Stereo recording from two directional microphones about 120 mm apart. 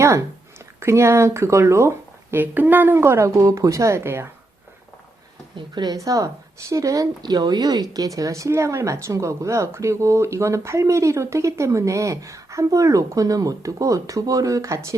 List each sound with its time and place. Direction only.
0.0 s a woman's voice: 25° right (ahead or behind)
5.5 s a woman's voice: 35° right (ahead or behind)